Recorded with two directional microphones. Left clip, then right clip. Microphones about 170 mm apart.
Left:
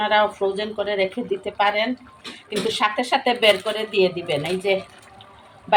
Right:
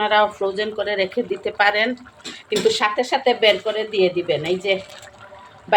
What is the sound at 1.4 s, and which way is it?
Speech, 35° right (ahead or behind).